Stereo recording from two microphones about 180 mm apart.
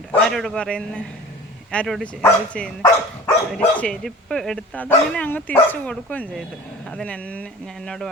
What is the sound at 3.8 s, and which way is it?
Speech, 5° left (ahead or behind).